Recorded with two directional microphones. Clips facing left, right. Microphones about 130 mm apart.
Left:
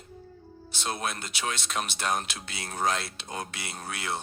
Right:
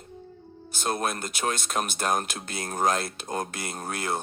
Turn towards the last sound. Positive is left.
turn(degrees=-45)  # may be behind; listen again after turning